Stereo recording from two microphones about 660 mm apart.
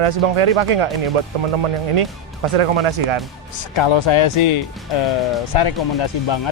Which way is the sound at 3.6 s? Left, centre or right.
Left.